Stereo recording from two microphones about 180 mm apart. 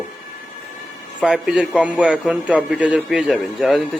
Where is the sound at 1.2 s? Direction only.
5° right (ahead or behind).